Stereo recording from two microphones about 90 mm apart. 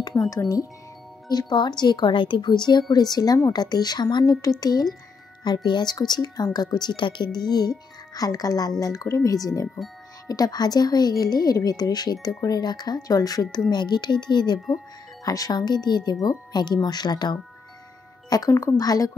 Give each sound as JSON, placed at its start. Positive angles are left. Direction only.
{"t": 0.3, "sound": "speech", "side_deg": 40}
{"t": 1.3, "sound": "speech", "side_deg": 55}
{"t": 18.5, "sound": "speech", "side_deg": 30}
{"t": 18.8, "sound": "speech", "side_deg": 45}